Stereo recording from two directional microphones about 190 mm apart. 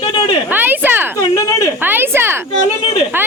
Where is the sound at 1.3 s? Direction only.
15° left (ahead or behind).